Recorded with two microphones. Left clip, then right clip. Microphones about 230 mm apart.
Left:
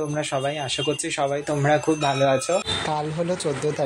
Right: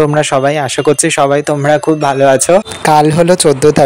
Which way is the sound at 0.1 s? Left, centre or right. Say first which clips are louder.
Right 15 dB; right.